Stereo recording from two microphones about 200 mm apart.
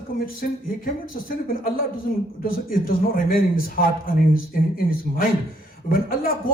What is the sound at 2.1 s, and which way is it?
A man's voice, 45° left (ahead or behind).